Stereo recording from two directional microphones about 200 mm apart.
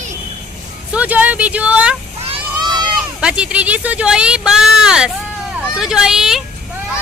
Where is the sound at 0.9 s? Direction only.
5° right (ahead or behind).